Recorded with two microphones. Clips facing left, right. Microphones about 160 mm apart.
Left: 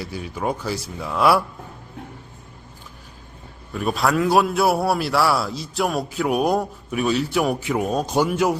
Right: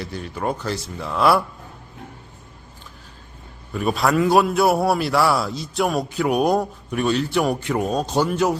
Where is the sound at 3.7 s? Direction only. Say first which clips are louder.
Right 1 dB; centre (ahead or behind).